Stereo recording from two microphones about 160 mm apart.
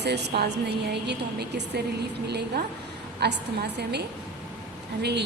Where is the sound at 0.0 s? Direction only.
90° right.